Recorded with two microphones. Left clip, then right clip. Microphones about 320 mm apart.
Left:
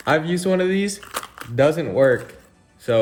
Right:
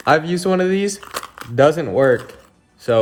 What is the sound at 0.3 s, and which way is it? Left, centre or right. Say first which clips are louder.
Speech: right 2 dB; centre.